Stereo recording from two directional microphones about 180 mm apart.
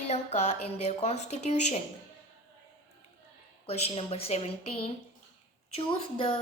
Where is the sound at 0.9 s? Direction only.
35° left (ahead or behind).